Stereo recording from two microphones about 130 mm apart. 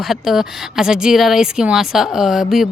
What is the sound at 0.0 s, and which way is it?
Speech, centre (ahead or behind).